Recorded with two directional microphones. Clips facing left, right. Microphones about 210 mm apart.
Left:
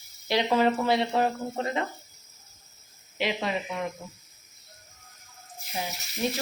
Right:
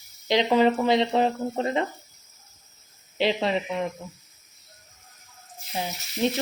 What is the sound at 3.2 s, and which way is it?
Speech, 30° right (ahead or behind).